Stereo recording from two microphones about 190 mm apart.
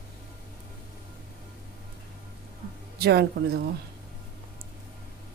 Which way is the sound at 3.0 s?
60° right (ahead or behind).